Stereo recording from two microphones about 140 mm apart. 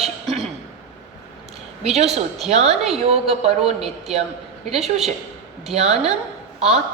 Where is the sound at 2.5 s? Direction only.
50° right (ahead or behind).